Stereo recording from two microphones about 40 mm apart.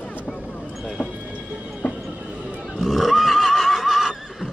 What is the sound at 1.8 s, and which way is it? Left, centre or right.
Train, left.